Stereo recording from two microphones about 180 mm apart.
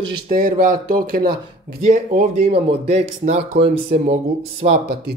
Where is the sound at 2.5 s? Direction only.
30° right (ahead or behind).